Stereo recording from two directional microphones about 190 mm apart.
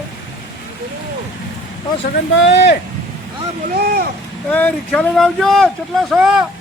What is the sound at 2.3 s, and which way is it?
Speech, 65° left (ahead or behind).